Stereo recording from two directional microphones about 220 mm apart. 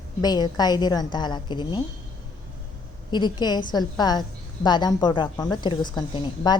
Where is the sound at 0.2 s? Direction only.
20° left (ahead or behind).